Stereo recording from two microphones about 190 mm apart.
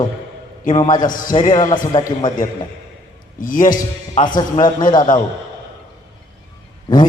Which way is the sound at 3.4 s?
45° left (ahead or behind).